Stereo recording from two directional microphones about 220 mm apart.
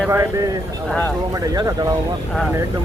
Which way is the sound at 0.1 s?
15° right (ahead or behind).